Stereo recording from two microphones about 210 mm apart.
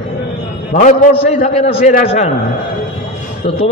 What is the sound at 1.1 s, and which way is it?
A man's voice, 35° left (ahead or behind).